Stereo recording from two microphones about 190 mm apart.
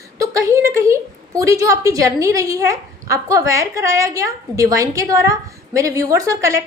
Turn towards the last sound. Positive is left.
turn(degrees=-15)  # may be behind; listen again after turning